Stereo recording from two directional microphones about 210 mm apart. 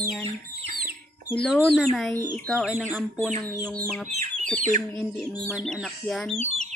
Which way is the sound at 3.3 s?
35° right (ahead or behind).